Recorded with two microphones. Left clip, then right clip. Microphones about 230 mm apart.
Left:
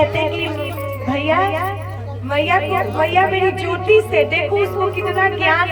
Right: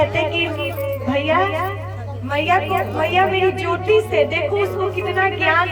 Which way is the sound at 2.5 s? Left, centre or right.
Left.